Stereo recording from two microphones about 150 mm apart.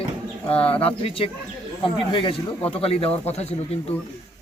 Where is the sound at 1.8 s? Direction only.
35° left (ahead or behind).